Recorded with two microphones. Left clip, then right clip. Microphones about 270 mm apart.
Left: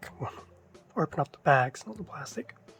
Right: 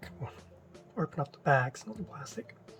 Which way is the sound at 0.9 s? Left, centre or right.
Centre.